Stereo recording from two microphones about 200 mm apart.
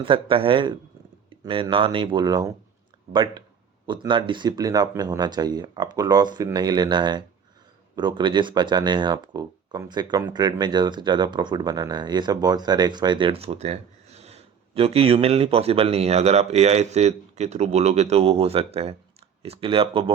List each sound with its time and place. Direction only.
0.0 s speech: 25° right (ahead or behind)